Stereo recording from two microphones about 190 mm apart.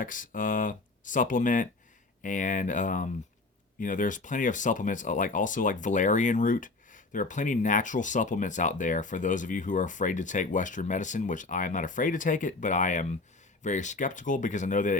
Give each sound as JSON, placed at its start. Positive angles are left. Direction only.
{"t": 0.0, "sound": "speech", "side_deg": 45}